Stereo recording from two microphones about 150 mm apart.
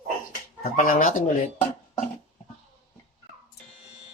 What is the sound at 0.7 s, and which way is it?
Speech, 70° left (ahead or behind).